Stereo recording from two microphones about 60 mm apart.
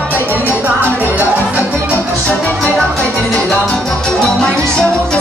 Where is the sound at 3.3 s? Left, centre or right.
Centre.